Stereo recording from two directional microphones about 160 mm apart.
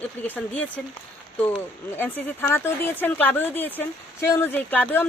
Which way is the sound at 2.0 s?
10° left (ahead or behind).